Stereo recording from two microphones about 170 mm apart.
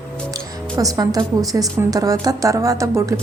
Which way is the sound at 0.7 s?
20° right (ahead or behind).